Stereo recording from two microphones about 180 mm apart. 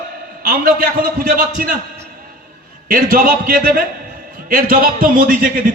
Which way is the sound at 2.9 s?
50° right (ahead or behind).